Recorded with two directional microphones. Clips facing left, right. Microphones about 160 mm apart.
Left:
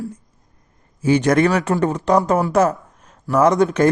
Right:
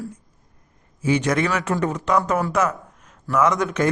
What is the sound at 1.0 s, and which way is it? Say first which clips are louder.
A man's voice: left 5 dB; 40° left (ahead or behind).